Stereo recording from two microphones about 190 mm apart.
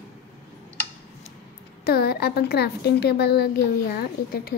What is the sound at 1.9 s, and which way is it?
A woman's voice, 55° left (ahead or behind).